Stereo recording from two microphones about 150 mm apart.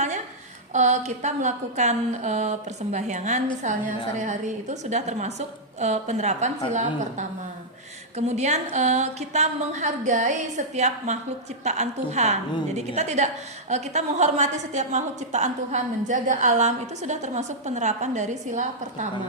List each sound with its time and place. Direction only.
0.7 s a woman's voice: 50° right (ahead or behind)